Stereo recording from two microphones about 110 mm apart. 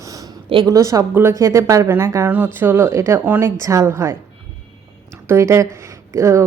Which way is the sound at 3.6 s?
30° right (ahead or behind).